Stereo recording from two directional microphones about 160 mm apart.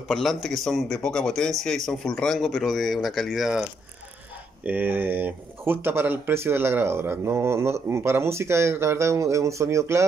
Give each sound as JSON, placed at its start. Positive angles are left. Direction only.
{"t": 0.1, "sound": "speech", "side_deg": 0}
{"t": 4.6, "sound": "speech", "side_deg": -10}